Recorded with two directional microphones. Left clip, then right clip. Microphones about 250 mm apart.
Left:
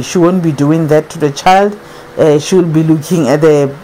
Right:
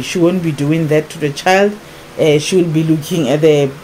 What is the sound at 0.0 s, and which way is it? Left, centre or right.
Speech, left.